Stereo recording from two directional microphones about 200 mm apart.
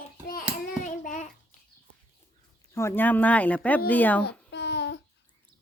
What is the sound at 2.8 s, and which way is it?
Speech, 10° left (ahead or behind).